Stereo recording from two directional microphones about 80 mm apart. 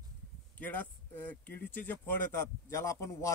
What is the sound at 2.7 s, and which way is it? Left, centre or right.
Speech, left.